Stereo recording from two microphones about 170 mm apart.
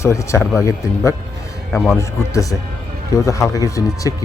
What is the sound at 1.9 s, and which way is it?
Speech, 20° left (ahead or behind).